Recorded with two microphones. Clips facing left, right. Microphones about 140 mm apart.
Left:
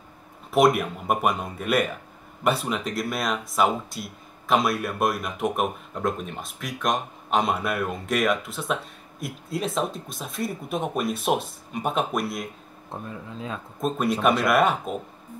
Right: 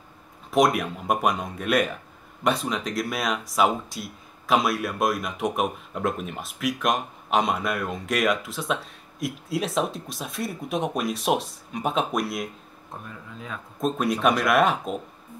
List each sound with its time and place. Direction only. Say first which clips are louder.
0.5 s speech: left 1 dB; 5° left (ahead or behind)
12.9 s speech: left 4 dB; 25° left (ahead or behind)
13.7 s speech: even; centre (ahead or behind)